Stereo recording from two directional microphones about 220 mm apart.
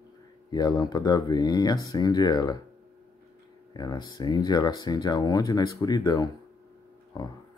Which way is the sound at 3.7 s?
20° left (ahead or behind).